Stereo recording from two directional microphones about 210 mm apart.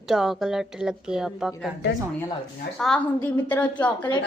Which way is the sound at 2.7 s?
5° left (ahead or behind).